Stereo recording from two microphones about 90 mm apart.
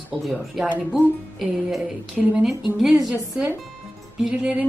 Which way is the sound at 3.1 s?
15° right (ahead or behind).